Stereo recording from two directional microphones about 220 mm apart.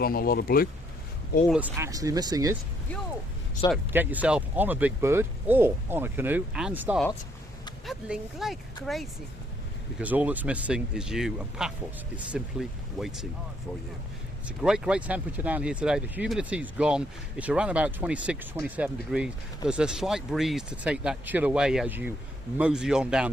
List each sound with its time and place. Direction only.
0.0 s speech: 40° left (ahead or behind)
1.5 s speech: 5° right (ahead or behind)
3.9 s speech: 10° right (ahead or behind)
14.4 s speech: 5° right (ahead or behind)